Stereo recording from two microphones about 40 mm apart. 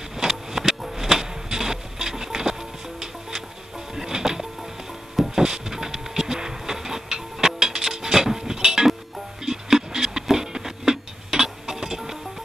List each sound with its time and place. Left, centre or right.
0.2 s music: centre
5.3 s printer: centre
9.4 s a sound: centre
10.3 s music: centre